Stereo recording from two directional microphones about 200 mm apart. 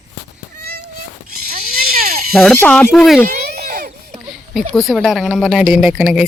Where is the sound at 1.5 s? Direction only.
45° right (ahead or behind).